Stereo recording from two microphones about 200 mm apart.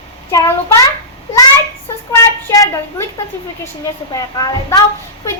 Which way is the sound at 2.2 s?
15° left (ahead or behind).